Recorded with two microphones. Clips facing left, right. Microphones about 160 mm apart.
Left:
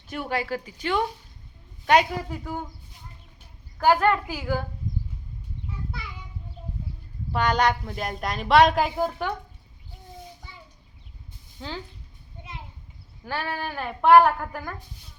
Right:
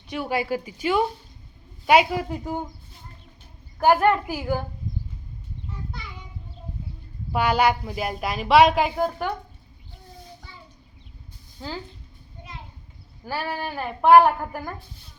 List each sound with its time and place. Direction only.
0.1 s a woman's voice: 5° right (ahead or behind)
2.3 s a woman's voice: 20° right (ahead or behind)
3.8 s a woman's voice: 15° right (ahead or behind)
7.3 s a woman's voice: 5° right (ahead or behind)
13.2 s a woman's voice: 10° right (ahead or behind)